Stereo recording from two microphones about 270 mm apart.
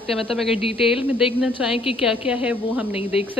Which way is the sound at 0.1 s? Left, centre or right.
Centre.